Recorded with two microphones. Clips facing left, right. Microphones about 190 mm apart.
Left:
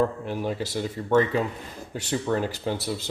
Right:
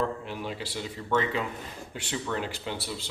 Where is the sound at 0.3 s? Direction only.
45° left (ahead or behind).